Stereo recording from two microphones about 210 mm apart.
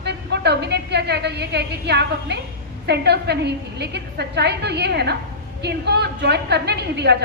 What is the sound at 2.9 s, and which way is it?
A woman's voice, 50° right (ahead or behind).